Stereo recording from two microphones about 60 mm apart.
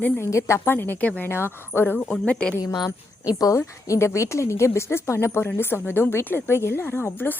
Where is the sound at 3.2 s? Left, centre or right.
Left.